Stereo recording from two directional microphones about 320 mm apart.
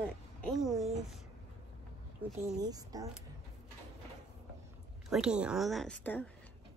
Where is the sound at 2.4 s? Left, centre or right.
Centre.